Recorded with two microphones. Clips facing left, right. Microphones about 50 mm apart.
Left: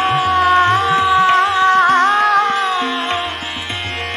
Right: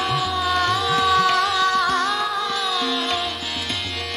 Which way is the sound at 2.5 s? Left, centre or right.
Left.